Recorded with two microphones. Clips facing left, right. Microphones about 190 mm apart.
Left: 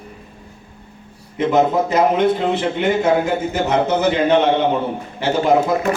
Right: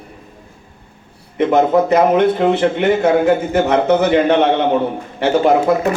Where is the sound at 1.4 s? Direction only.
60° right (ahead or behind).